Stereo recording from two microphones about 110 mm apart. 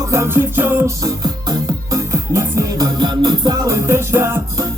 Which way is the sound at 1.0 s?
35° right (ahead or behind).